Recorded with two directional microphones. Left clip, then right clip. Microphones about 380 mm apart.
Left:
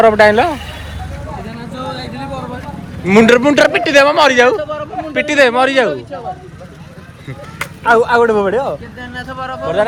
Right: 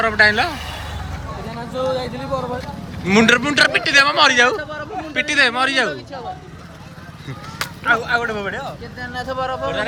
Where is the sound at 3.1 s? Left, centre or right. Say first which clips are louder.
Left 6 dB; centre.